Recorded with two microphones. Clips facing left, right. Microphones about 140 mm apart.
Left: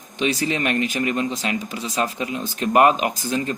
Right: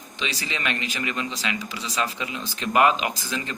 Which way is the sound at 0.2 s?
50° left (ahead or behind).